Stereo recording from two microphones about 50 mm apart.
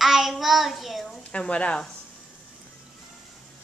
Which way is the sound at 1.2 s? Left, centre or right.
Left.